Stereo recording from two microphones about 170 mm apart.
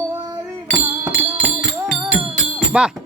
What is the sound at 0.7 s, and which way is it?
Music, 5° right (ahead or behind).